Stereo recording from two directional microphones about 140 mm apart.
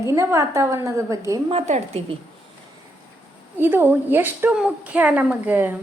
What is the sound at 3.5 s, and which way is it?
A woman's voice, 15° right (ahead or behind).